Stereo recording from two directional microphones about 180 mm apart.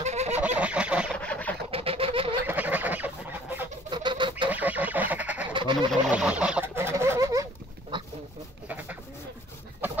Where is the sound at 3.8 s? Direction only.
25° right (ahead or behind).